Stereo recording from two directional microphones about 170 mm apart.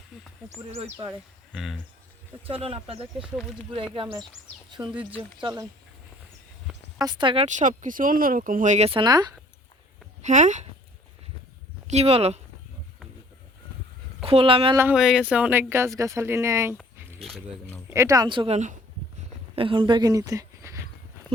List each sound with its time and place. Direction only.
0.1 s a sound: centre (ahead or behind)
1.5 s speech: centre (ahead or behind)
2.5 s speech: 35° right (ahead or behind)
7.0 s speech: 25° right (ahead or behind)
7.4 s speech: 45° right (ahead or behind)
8.9 s speech: 25° right (ahead or behind)
10.2 s speech: 45° right (ahead or behind)
11.9 s speech: 40° right (ahead or behind)
14.3 s speech: 35° right (ahead or behind)
14.9 s speech: 5° right (ahead or behind)
17.2 s speech: 5° left (ahead or behind)
17.9 s speech: 20° right (ahead or behind); by 18.8 s 45° right (ahead or behind)
19.5 s speech: 30° right (ahead or behind)